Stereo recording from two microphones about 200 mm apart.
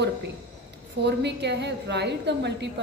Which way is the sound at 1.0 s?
55° right (ahead or behind).